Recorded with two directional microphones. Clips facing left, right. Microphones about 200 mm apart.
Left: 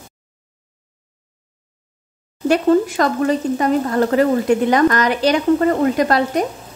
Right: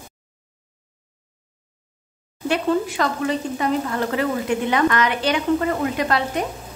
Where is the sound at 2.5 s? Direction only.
45° left (ahead or behind).